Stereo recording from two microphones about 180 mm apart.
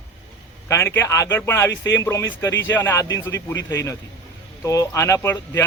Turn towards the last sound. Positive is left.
turn(degrees=15)  # may be behind; listen again after turning